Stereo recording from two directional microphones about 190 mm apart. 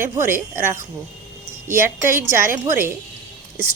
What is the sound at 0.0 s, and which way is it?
Speech, 10° right (ahead or behind).